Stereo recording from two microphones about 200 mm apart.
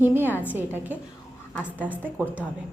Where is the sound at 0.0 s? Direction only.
10° right (ahead or behind).